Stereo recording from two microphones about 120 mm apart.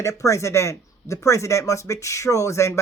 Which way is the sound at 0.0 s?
25° left (ahead or behind).